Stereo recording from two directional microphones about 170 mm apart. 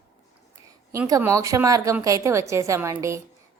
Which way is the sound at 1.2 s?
15° right (ahead or behind).